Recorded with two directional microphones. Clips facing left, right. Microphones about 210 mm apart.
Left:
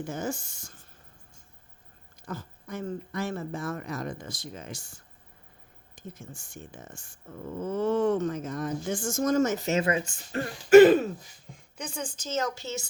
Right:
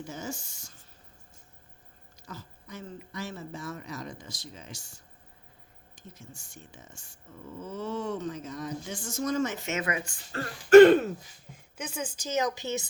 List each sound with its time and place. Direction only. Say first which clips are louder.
0.0 s speech: left 5 dB; 55° left (ahead or behind)
2.2 s speech: left 7 dB; 50° left (ahead or behind); by 10.5 s 20° left (ahead or behind)
10.7 s throat clearing: right 1 dB; 5° left (ahead or behind)
11.5 s a woman's voice: even; 5° right (ahead or behind)